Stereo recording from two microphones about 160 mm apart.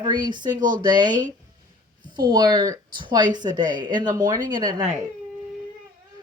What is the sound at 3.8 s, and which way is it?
Speech, 25° right (ahead or behind).